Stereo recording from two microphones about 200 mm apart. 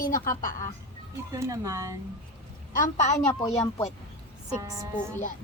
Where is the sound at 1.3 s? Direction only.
15° right (ahead or behind).